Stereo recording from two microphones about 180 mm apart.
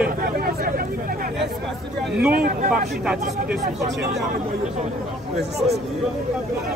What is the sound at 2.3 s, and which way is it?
Speech, 55° right (ahead or behind).